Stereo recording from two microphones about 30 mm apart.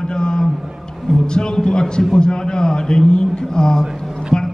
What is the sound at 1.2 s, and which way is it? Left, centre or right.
A man's voice, left.